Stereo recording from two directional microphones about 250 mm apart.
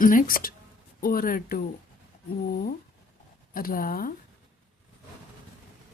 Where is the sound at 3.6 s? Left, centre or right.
Left.